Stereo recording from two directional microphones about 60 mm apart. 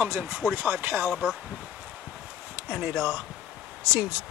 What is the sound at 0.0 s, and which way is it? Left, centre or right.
Speech, centre.